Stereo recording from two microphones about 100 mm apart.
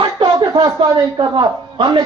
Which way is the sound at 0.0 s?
50° right (ahead or behind).